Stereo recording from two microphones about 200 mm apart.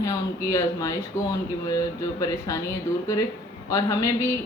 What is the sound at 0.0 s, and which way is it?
A woman's voice, 15° left (ahead or behind).